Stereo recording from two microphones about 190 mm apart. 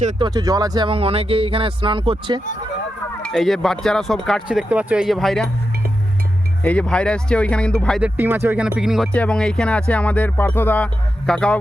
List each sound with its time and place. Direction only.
0.2 s speech: 20° right (ahead or behind)
3.2 s speech: centre (ahead or behind)
6.6 s speech: 5° left (ahead or behind)
8.0 s speech: 10° right (ahead or behind)